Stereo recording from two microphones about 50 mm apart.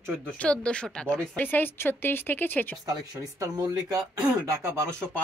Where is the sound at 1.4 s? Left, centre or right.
Left.